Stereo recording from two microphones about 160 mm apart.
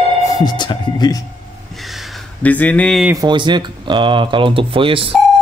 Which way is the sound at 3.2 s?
30° right (ahead or behind).